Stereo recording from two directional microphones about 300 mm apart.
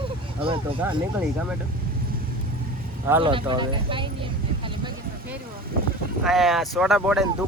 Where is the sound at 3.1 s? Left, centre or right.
Centre.